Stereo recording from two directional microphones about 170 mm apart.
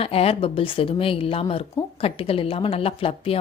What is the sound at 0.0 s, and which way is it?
Speech, 35° left (ahead or behind).